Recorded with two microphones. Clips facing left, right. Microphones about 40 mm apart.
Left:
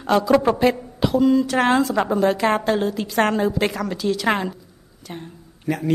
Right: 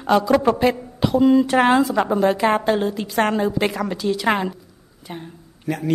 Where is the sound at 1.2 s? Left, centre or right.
Right.